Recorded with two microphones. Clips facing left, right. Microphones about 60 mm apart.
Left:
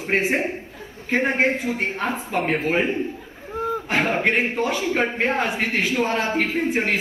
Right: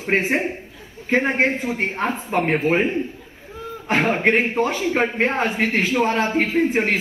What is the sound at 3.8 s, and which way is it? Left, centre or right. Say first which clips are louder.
A man's voice: right 4 dB; right.